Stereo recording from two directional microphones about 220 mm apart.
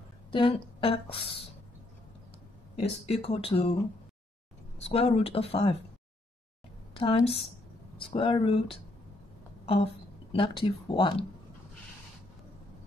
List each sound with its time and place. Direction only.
0.3 s a woman's voice: 20° left (ahead or behind)
2.7 s a woman's voice: 30° left (ahead or behind)
4.8 s a woman's voice: 25° left (ahead or behind)
7.0 s a woman's voice: 25° left (ahead or behind)
10.3 s a woman's voice: 25° left (ahead or behind)